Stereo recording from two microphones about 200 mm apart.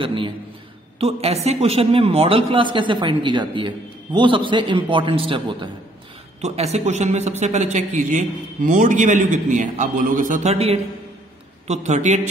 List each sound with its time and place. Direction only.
0.0 s a man's voice: 25° right (ahead or behind)